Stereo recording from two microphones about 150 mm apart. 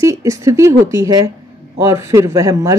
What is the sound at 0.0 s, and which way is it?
A woman's voice, 20° right (ahead or behind).